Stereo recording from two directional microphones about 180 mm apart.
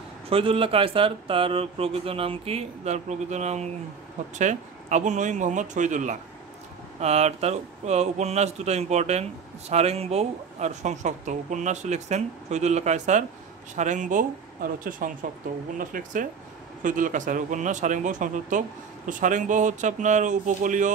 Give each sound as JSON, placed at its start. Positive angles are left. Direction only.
{"t": 0.3, "sound": "speech", "side_deg": -30}